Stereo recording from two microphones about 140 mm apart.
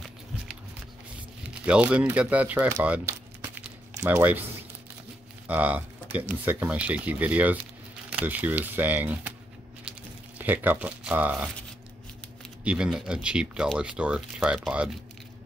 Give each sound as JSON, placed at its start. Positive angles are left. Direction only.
{"t": 1.7, "sound": "speech", "side_deg": -10}
{"t": 5.5, "sound": "speech", "side_deg": -10}
{"t": 10.4, "sound": "speech", "side_deg": -15}
{"t": 12.6, "sound": "speech", "side_deg": -5}